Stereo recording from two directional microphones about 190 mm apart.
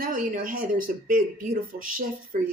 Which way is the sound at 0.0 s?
45° right (ahead or behind).